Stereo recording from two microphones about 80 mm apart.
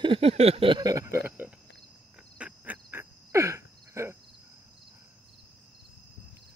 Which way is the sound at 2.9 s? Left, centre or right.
Right.